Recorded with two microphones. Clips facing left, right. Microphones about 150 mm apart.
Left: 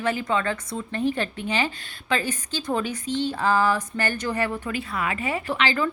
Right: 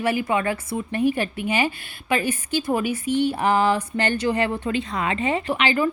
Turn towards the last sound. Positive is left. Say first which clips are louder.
# right 3 dB
turn(degrees=-15)  # may be behind; listen again after turning